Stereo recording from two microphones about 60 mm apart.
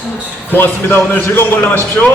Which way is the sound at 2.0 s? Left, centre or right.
Left.